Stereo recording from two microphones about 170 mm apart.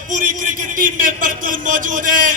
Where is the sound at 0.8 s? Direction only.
55° right (ahead or behind).